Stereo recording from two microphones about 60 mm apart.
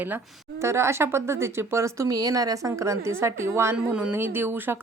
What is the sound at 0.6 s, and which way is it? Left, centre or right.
Speech, right.